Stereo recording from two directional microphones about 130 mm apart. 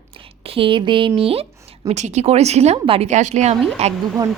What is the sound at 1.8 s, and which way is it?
A woman's voice, 65° right (ahead or behind).